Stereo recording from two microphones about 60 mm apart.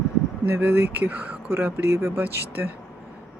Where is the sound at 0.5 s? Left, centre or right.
Right.